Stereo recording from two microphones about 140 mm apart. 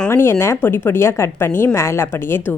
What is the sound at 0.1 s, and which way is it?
A woman's voice, 15° left (ahead or behind).